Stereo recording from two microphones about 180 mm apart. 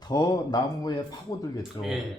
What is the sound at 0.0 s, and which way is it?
A man's voice, 20° left (ahead or behind).